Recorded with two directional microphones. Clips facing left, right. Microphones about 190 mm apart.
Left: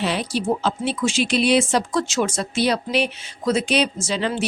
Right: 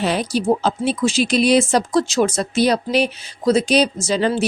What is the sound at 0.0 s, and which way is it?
A woman's voice, 45° right (ahead or behind).